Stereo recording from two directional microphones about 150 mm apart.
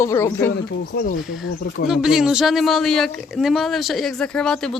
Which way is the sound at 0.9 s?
90° left.